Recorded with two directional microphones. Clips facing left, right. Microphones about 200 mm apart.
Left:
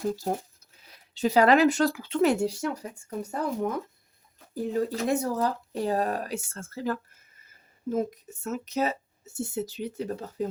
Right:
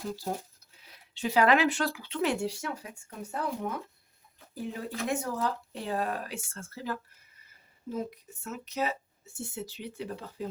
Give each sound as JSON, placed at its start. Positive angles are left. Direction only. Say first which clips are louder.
{"t": 0.8, "sound": "speech", "louder": "left 7 dB", "side_deg": 40}